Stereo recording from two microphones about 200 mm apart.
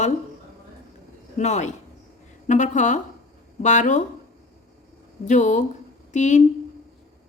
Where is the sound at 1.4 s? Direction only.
35° left (ahead or behind).